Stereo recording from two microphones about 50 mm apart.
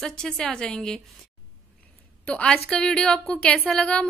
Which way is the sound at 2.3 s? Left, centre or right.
Centre.